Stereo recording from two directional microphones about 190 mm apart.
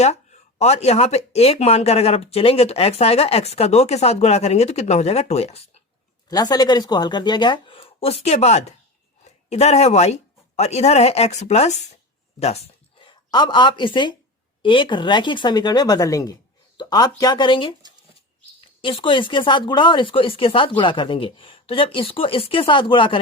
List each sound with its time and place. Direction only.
0.6 s speech: 35° left (ahead or behind)
6.2 s speech: 20° left (ahead or behind)
18.8 s speech: 25° left (ahead or behind)